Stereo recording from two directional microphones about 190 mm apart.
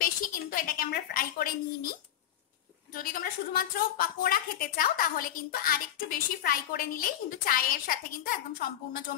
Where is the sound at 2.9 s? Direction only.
50° left (ahead or behind).